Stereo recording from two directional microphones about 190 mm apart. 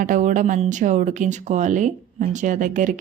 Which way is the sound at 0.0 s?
45° right (ahead or behind).